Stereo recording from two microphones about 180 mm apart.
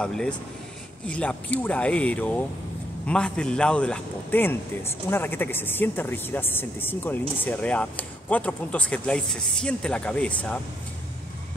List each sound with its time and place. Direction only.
0.0 s speech: 5° left (ahead or behind)